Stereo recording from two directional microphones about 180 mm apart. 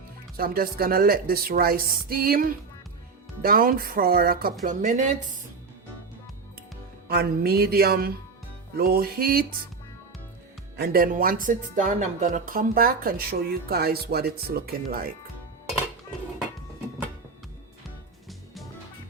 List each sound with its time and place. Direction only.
0.3 s speech: 55° right (ahead or behind)
4.6 s a woman's voice: 45° right (ahead or behind)
7.1 s speech: 60° right (ahead or behind)
10.8 s speech: 55° right (ahead or behind)